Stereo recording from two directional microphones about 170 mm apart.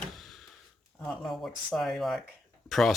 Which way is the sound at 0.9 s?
5° left (ahead or behind).